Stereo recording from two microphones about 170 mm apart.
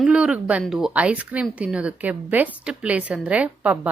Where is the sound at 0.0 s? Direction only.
5° right (ahead or behind).